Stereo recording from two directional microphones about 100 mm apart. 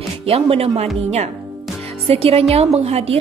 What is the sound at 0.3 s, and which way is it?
Speech, 85° right.